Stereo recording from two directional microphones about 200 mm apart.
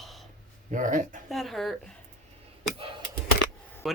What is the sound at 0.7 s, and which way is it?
Speech, 40° right (ahead or behind).